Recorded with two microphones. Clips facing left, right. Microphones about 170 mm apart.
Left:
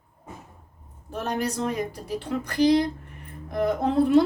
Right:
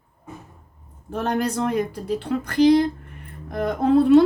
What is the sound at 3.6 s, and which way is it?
Speech, 60° right (ahead or behind).